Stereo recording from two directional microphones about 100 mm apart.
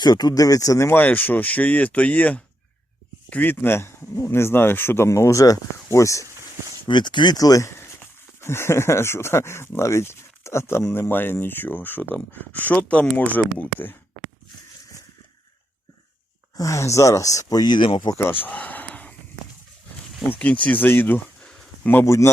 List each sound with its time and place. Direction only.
0.0 s speech: 40° left (ahead or behind)
6.2 s a sound: 35° right (ahead or behind)
6.8 s speech: 50° left (ahead or behind); by 13.9 s 15° left (ahead or behind)
16.6 s speech: 30° left (ahead or behind); by 18.1 s 55° left (ahead or behind)
18.1 s speech: 25° left (ahead or behind)
18.4 s a sound: 15° left (ahead or behind)
20.4 s speech: 10° left (ahead or behind)
22.0 s speech: 30° left (ahead or behind)